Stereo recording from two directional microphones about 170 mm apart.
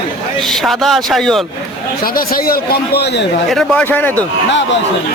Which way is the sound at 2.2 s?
60° left (ahead or behind).